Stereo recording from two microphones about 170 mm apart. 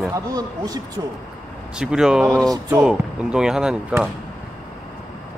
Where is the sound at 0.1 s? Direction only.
20° right (ahead or behind).